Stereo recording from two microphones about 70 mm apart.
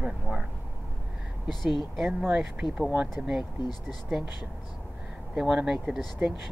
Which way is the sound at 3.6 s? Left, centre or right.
Left.